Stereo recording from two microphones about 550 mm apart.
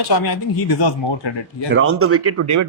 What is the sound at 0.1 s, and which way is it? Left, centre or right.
Speech, left.